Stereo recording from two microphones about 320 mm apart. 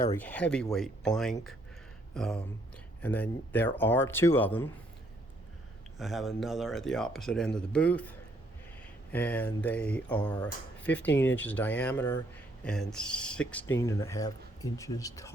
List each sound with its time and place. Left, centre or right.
0.1 s speech: centre
6.0 s speech: centre
9.1 s speech: centre